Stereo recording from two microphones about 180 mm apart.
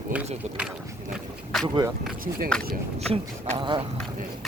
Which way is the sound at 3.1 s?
30° right (ahead or behind).